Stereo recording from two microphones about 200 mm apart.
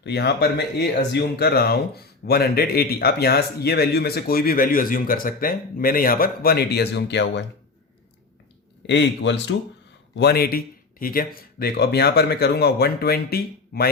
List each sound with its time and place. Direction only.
0.0 s speech: 55° left (ahead or behind)
8.9 s a man's voice: 60° left (ahead or behind)